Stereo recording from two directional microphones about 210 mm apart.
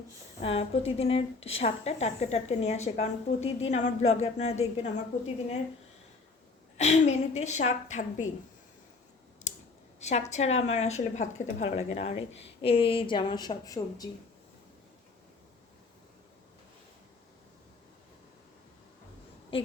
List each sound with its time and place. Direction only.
0.4 s a woman's voice: 30° left (ahead or behind)
6.7 s a woman's voice: 35° left (ahead or behind)
10.0 s a woman's voice: 30° left (ahead or behind)
19.5 s speech: 25° left (ahead or behind)